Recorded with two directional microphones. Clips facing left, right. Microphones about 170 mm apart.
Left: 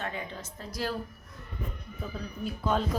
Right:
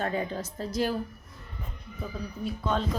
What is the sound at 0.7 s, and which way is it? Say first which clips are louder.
Speech: right 5 dB; 20° right (ahead or behind).